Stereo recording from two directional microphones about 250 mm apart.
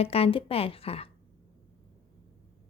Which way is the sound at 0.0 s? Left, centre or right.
Left.